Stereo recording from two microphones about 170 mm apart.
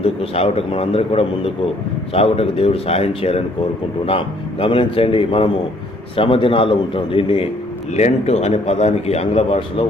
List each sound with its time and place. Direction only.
0.0 s a man's voice: 35° left (ahead or behind)
4.6 s a man's voice: 30° left (ahead or behind)